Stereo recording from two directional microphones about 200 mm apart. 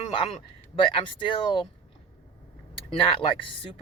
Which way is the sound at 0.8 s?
25° left (ahead or behind).